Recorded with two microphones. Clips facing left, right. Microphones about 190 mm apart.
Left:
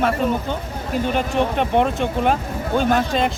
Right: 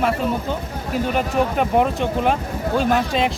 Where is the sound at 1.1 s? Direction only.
5° right (ahead or behind).